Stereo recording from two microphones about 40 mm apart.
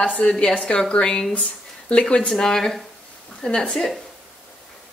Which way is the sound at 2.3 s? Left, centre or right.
Centre.